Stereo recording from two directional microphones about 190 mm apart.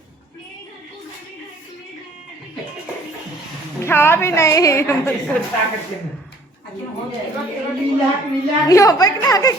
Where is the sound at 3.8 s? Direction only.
10° left (ahead or behind).